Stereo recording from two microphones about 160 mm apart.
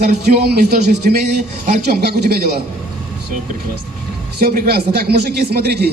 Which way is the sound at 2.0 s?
85° right.